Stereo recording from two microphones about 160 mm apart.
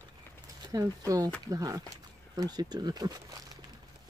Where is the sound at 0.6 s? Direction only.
25° right (ahead or behind).